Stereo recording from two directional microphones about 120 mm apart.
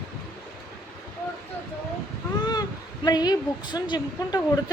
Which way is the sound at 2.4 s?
35° left (ahead or behind).